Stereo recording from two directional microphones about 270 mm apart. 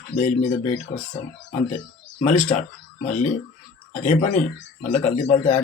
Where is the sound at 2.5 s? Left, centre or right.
Left.